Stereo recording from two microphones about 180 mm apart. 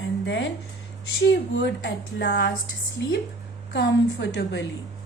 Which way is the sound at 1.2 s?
75° left (ahead or behind).